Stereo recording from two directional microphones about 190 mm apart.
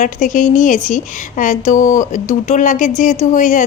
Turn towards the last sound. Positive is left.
turn(degrees=40)  # may be behind; listen again after turning